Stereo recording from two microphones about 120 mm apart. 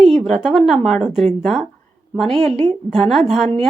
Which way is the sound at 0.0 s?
Centre (ahead or behind).